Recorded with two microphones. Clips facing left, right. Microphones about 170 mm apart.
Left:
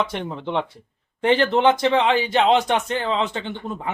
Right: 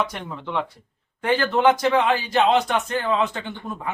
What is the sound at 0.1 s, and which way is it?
Speech, 25° left (ahead or behind).